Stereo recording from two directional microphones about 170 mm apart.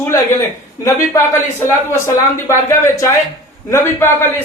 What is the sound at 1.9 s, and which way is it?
Speech, 15° left (ahead or behind).